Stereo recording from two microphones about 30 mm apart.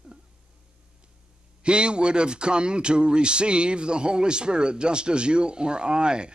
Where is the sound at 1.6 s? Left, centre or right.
Right.